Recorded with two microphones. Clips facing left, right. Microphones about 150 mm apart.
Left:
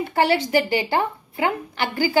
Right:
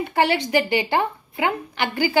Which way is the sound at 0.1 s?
20° right (ahead or behind).